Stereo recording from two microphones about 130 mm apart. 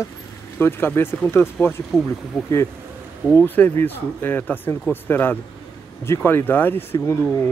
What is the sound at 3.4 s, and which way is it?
Speech, 15° left (ahead or behind).